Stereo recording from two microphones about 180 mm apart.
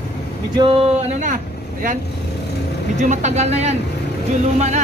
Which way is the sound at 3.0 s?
40° right (ahead or behind).